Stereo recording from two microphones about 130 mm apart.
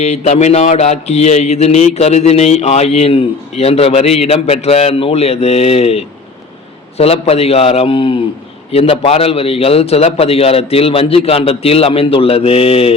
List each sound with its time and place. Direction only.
0.0 s mantra: 60° left (ahead or behind)